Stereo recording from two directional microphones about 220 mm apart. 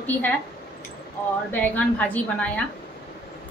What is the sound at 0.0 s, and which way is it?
Speech, 5° left (ahead or behind).